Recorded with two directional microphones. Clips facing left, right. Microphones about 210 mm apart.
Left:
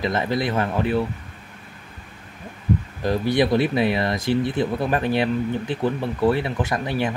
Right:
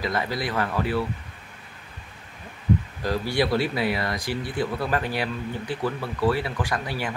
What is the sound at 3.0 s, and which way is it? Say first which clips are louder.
Speech: left 5 dB; 20° left (ahead or behind).